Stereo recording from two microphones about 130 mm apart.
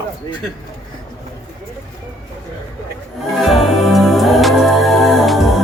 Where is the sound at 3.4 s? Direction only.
Centre (ahead or behind).